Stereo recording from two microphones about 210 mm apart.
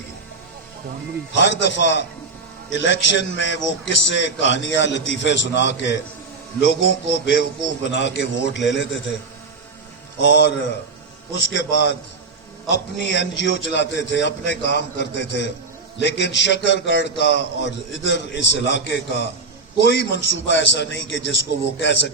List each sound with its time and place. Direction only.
1.4 s a man's voice: 60° left (ahead or behind)
10.2 s a man's voice: 55° left (ahead or behind)
12.7 s a man's voice: 60° left (ahead or behind)